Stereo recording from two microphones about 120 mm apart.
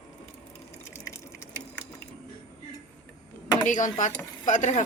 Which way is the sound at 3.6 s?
90° left.